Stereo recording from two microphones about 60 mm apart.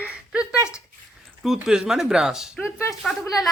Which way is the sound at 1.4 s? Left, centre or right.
Centre.